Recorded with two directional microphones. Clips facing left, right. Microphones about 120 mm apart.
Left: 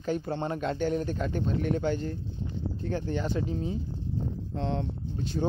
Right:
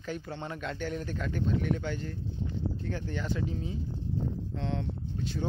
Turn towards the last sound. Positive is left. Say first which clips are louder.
# left 4 dB
turn(degrees=30)  # may be behind; listen again after turning